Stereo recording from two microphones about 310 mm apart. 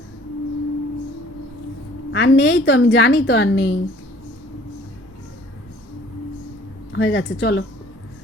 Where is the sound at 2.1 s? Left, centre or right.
Left.